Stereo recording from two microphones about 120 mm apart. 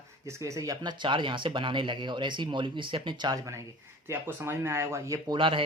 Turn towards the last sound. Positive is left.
turn(degrees=-45)  # may be behind; listen again after turning